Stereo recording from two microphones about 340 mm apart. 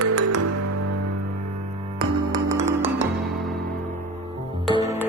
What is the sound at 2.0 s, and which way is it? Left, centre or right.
Music, centre.